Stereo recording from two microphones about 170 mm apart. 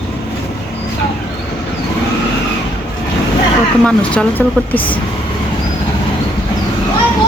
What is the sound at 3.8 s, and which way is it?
Speech, 5° left (ahead or behind).